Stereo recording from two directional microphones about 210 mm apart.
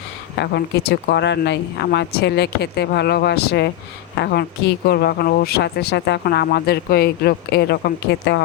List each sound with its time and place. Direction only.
0.3 s speech: 50° left (ahead or behind)